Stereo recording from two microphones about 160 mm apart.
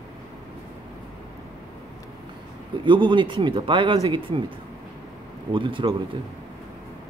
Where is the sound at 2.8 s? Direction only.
30° right (ahead or behind).